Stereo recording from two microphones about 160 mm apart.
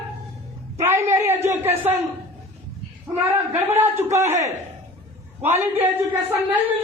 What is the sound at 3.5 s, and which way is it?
Speech, 15° right (ahead or behind).